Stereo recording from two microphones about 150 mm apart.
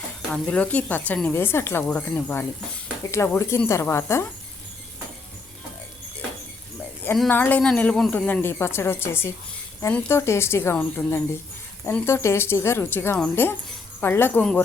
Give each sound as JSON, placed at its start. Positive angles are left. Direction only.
{"t": 0.4, "sound": "speech", "side_deg": 10}
{"t": 7.3, "sound": "speech", "side_deg": 10}